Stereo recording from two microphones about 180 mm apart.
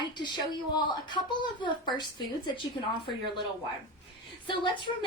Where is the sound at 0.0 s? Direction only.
25° left (ahead or behind).